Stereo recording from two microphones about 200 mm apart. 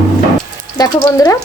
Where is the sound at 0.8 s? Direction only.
20° left (ahead or behind).